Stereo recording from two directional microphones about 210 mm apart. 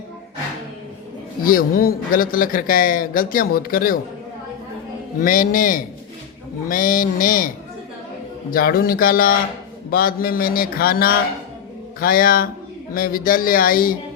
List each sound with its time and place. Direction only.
1.5 s a man's voice: 45° left (ahead or behind)
5.2 s a man's voice: 40° left (ahead or behind)
8.4 s mantra: 45° left (ahead or behind)